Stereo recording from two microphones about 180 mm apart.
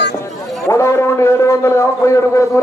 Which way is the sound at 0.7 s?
15° left (ahead or behind).